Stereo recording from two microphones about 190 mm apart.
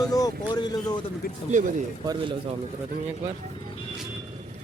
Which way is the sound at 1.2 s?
50° left (ahead or behind).